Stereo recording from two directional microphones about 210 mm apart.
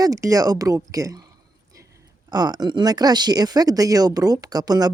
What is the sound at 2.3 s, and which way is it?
Speech, 20° right (ahead or behind).